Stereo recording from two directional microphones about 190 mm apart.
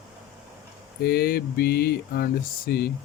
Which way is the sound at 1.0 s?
55° left (ahead or behind).